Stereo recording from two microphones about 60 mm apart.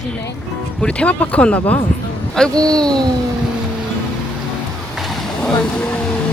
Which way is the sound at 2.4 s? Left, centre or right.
Centre.